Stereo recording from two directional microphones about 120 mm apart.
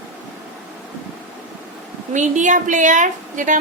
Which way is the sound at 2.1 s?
90° right.